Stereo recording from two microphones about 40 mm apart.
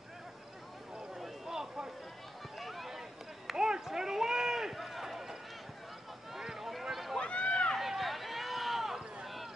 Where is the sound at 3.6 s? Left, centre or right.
Centre.